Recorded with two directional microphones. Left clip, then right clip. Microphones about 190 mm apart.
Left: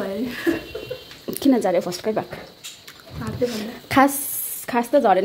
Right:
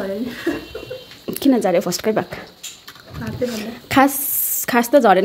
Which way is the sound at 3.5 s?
5° right (ahead or behind).